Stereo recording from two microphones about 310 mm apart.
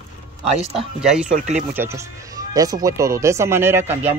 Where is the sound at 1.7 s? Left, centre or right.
Centre.